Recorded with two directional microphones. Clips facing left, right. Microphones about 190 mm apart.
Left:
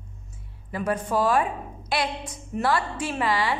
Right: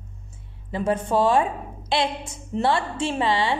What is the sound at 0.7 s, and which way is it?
A woman's voice, 25° right (ahead or behind).